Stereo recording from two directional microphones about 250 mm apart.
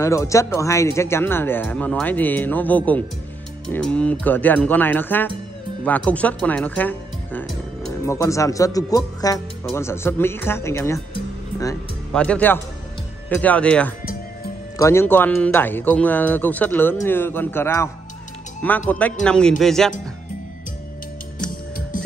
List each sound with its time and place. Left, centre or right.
0.0 s speech: centre
12.1 s speech: centre
21.5 s music: left